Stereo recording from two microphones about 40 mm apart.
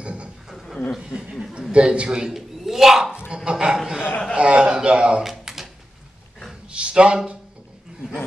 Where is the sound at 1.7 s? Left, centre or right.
Right.